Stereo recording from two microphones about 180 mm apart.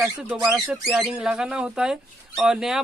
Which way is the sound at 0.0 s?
5° right (ahead or behind).